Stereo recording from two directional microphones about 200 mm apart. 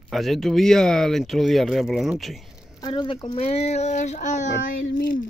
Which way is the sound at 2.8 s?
25° left (ahead or behind).